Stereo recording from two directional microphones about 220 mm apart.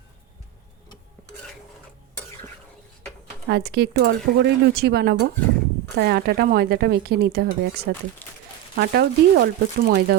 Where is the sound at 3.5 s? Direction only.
50° right (ahead or behind).